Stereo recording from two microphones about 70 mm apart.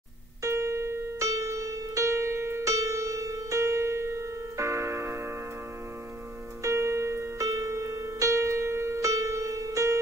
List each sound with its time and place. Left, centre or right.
0.4 s music: right
6.6 s keyboard: right